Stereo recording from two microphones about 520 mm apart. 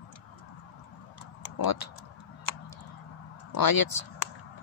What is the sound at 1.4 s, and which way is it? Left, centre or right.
Tick-tock, left.